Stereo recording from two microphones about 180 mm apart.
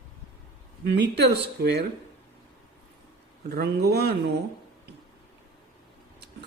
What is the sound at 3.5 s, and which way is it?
Speech, 60° right (ahead or behind).